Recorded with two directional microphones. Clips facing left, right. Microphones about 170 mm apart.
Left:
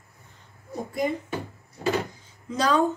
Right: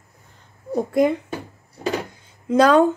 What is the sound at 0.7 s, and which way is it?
Speech, 65° right (ahead or behind).